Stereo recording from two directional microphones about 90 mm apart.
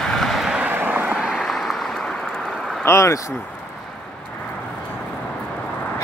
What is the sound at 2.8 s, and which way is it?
Speech, 35° left (ahead or behind).